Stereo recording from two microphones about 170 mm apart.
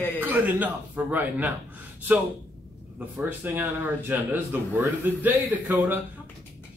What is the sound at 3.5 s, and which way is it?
Speech, 10° right (ahead or behind).